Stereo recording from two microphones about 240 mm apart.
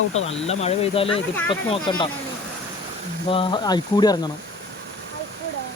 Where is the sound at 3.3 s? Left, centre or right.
Centre.